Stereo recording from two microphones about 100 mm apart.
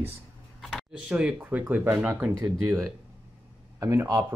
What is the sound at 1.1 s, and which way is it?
Speech, 15° right (ahead or behind).